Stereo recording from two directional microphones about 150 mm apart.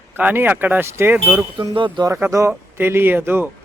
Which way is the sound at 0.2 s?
10° right (ahead or behind).